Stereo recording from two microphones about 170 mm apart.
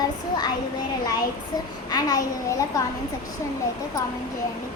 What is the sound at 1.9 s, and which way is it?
A child's voice, 20° left (ahead or behind).